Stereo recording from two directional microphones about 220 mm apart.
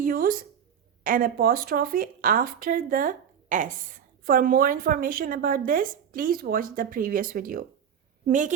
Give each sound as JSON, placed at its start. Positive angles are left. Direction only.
{"t": 0.0, "sound": "a woman's voice", "side_deg": -40}